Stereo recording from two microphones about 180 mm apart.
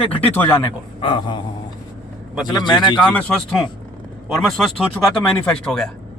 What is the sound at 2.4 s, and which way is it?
Speech, 25° left (ahead or behind).